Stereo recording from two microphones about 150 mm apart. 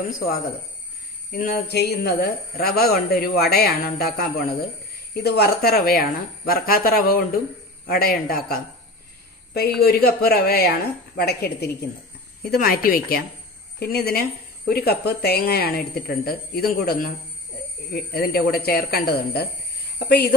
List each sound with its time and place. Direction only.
1.3 s speech: 80° left
12.4 s a woman's voice: 75° left (ahead or behind)
13.7 s speech: 90° left